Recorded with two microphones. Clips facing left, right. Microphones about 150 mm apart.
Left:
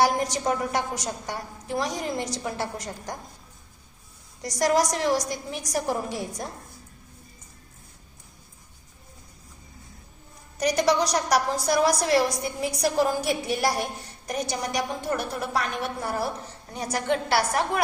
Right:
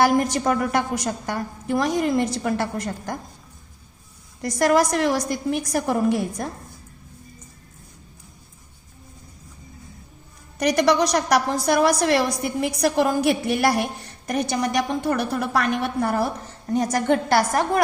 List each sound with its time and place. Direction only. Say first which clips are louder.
0.0 s a woman's voice: right 4 dB; 60° right (ahead or behind)
4.4 s a woman's voice: right 4 dB; 60° right (ahead or behind)
10.6 s a woman's voice: right 4 dB; 65° right (ahead or behind); by 17.7 s 45° right (ahead or behind)